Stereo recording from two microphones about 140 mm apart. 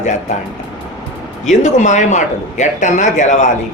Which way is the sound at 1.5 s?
60° left (ahead or behind).